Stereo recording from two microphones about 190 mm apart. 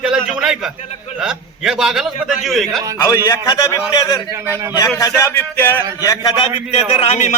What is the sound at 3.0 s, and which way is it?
A man's voice, 20° left (ahead or behind).